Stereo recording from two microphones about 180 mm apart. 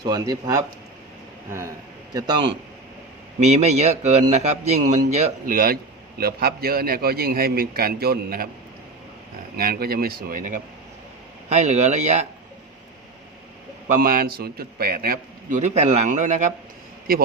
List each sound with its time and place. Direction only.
0.0 s a man's voice: 20° right (ahead or behind)
3.4 s a man's voice: 40° right (ahead or behind); by 8.4 s 60° right (ahead or behind)
9.6 s a man's voice: 55° right (ahead or behind)
11.4 s speech: 40° right (ahead or behind)
13.8 s a man's voice: 50° right (ahead or behind)